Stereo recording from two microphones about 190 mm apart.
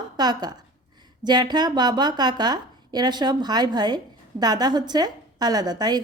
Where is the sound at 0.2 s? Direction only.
20° right (ahead or behind).